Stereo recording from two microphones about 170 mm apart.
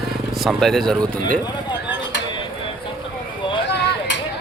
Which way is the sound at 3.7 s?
90° left.